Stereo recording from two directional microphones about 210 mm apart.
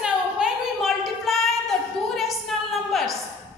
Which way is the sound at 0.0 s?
5° right (ahead or behind).